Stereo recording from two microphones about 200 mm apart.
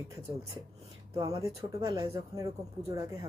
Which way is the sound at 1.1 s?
15° right (ahead or behind).